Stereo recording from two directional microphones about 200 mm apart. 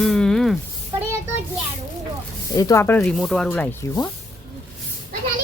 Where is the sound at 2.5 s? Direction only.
15° left (ahead or behind).